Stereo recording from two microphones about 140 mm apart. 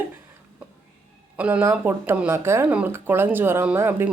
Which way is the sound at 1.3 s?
10° right (ahead or behind).